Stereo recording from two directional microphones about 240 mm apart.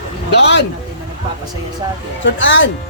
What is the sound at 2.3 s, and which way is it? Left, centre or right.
Speech, left.